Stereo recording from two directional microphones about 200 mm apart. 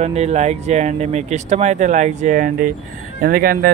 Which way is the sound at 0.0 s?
35° right (ahead or behind).